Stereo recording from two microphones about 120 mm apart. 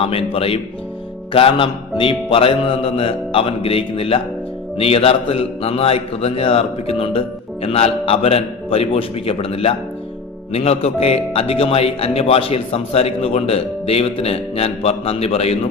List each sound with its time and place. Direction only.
0.0 s music: 50° left (ahead or behind)
4.8 s speech: 55° left (ahead or behind)